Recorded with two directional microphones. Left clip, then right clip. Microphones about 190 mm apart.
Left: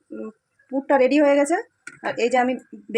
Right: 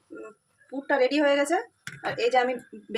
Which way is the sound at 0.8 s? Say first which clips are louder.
Left 5 dB; 55° left (ahead or behind).